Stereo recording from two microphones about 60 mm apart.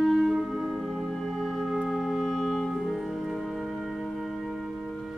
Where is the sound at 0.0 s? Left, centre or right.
Centre.